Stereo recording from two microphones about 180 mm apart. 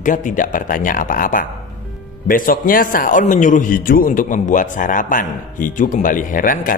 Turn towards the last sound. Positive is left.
turn(degrees=50)  # may be behind; listen again after turning